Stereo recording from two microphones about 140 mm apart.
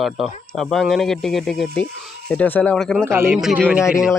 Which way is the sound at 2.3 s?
10° left (ahead or behind).